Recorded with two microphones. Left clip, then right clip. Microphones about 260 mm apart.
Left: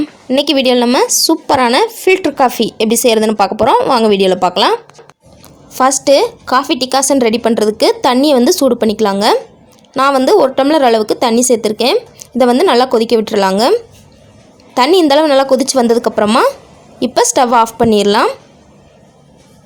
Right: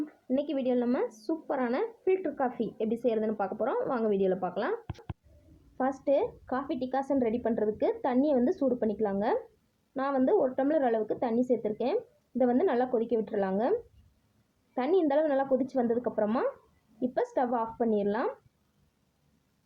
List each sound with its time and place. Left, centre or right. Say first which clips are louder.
0.3 s speech: left 19 dB; left
5.7 s speech: left 19 dB; left
14.8 s speech: left 18 dB; left